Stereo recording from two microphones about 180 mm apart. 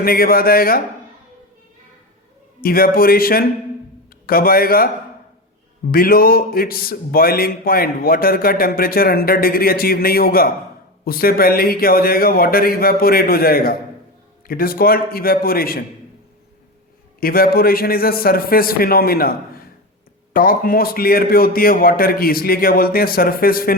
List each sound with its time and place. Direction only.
0.0 s a man's voice: 55° left (ahead or behind)
2.6 s a man's voice: 55° left (ahead or behind)
5.9 s a man's voice: 55° left (ahead or behind)
17.2 s a man's voice: 55° left (ahead or behind)